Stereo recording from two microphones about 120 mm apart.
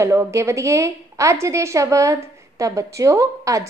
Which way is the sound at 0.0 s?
25° right (ahead or behind).